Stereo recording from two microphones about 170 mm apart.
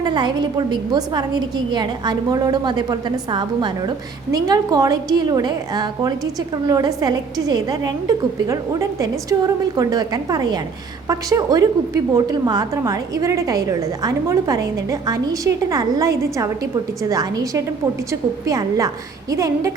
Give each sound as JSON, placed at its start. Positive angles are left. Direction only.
{"t": 0.0, "sound": "a woman's voice", "side_deg": -25}